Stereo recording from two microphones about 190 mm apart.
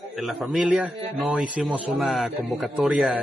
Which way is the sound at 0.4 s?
5° right (ahead or behind).